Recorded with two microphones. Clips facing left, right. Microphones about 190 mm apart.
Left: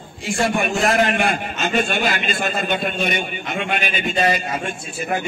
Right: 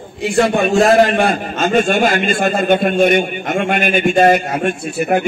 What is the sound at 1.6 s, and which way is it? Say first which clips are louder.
A man's voice: right 9 dB; 45° right (ahead or behind).